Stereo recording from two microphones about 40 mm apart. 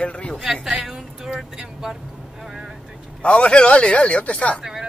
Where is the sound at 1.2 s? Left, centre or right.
Centre.